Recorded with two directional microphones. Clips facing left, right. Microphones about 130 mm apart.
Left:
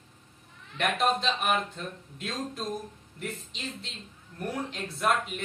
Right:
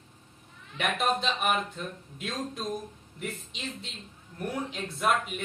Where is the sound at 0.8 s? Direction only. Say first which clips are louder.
Left 1 dB; centre (ahead or behind).